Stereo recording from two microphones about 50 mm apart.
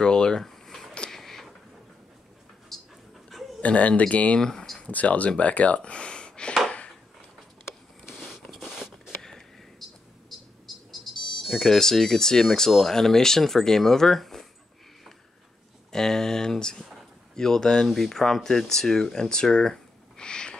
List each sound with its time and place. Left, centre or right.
0.0 s speech: centre
0.5 s a sound: centre
2.7 s pant: centre
3.6 s speech: left
4.4 s a sound: centre
4.8 s speech: left
8.5 s writing: centre
9.2 s a sound: centre
11.3 s speech: centre
15.9 s a sound: centre
17.4 s speech: centre
17.8 s speech: centre